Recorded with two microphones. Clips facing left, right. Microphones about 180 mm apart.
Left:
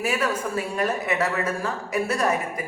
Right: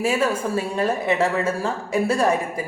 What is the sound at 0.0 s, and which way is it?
A man's voice, 30° right (ahead or behind).